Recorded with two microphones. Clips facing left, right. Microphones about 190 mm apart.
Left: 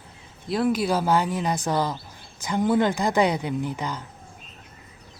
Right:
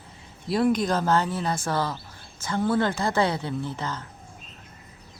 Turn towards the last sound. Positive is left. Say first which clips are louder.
# left 2 dB
turn(degrees=15)  # may be behind; listen again after turning